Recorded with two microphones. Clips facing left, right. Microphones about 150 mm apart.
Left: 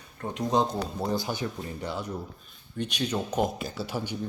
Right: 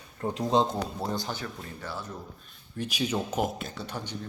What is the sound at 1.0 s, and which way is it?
Speech, 5° left (ahead or behind).